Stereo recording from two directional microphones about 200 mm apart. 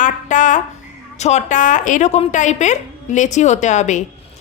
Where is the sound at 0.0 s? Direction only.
40° left (ahead or behind).